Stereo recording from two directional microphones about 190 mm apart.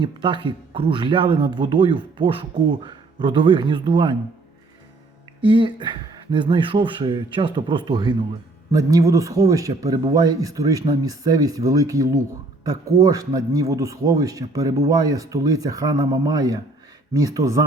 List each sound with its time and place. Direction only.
0.0 s speech: 25° right (ahead or behind)
5.4 s speech: 25° right (ahead or behind)